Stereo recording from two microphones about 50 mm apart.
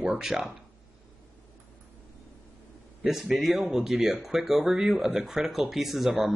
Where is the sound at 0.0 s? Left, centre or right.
Centre.